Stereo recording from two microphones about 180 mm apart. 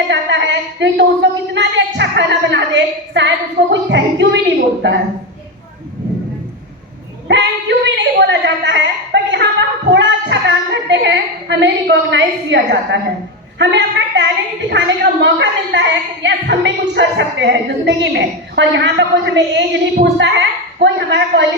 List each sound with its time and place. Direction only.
0.1 s a woman's voice: 75° right (ahead or behind)
7.3 s a woman's voice: 75° right (ahead or behind)